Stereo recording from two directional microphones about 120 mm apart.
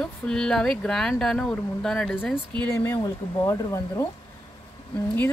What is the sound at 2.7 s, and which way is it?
Speech, 20° left (ahead or behind).